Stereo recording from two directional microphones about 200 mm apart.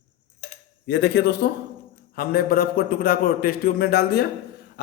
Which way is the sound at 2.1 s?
50° left (ahead or behind).